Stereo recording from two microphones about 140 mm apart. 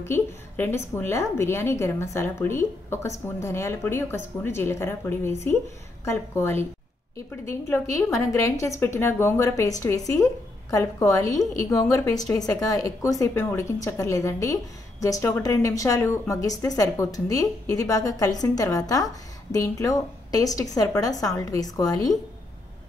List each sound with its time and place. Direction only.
0.0 s a woman's voice: 20° left (ahead or behind)